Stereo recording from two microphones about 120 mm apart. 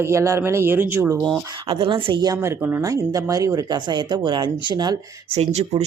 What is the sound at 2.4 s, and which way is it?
Speech, 20° right (ahead or behind).